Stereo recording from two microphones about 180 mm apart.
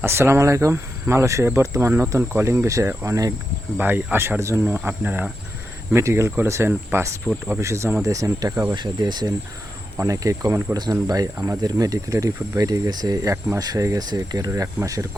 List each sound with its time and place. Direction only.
0.0 s speech: 15° right (ahead or behind)
7.3 s speech: 5° right (ahead or behind)
7.6 s speech: 15° right (ahead or behind)